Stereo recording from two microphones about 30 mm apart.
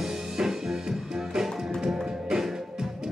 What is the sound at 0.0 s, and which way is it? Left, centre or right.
Music, centre.